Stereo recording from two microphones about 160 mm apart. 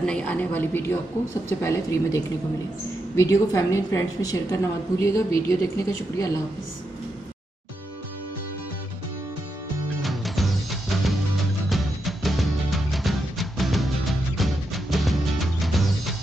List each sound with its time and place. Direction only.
0.0 s a woman's voice: 5° left (ahead or behind)
10.0 s music: centre (ahead or behind)